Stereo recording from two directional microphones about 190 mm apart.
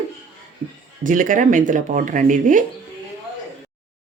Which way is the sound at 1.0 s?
45° right (ahead or behind).